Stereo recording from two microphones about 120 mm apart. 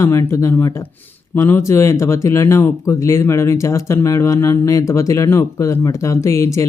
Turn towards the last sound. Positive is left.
turn(degrees=25)  # may be behind; listen again after turning